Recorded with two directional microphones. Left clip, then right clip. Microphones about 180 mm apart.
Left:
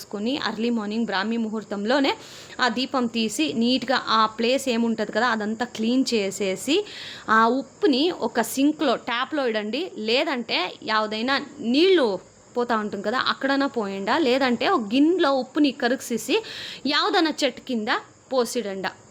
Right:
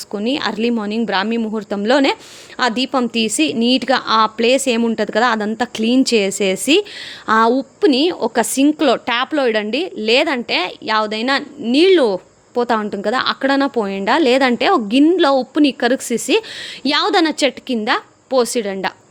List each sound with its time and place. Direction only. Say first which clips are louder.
0.1 s a woman's voice: right 7 dB; 45° right (ahead or behind)